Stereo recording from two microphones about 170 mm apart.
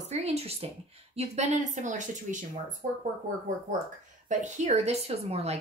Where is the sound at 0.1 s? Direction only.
40° right (ahead or behind).